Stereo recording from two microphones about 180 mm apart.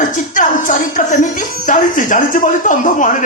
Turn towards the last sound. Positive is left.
turn(degrees=45)  # may be behind; listen again after turning